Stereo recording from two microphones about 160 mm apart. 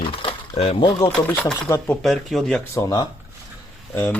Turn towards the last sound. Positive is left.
turn(degrees=10)  # may be behind; listen again after turning